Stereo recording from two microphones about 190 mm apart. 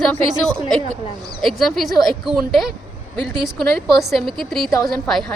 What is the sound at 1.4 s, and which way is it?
A woman's voice, centre (ahead or behind).